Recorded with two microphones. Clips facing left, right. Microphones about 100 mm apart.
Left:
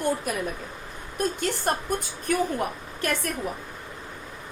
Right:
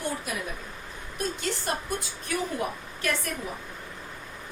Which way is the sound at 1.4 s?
50° left (ahead or behind).